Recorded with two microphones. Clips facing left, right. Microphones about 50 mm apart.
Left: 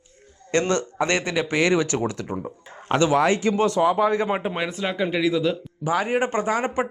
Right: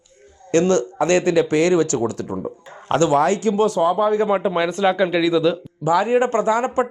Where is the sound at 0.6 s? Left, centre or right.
Left.